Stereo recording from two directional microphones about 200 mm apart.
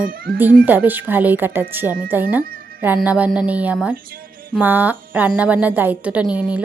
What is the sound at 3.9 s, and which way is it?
Music, 45° right (ahead or behind).